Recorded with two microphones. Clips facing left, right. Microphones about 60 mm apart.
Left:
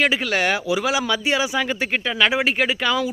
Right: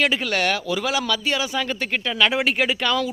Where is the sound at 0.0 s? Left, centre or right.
Centre.